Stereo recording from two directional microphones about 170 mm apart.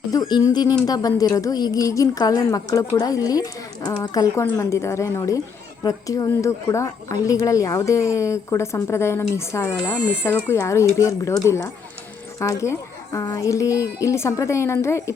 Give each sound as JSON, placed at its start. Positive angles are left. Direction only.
{"t": 0.1, "sound": "a woman's voice", "side_deg": 25}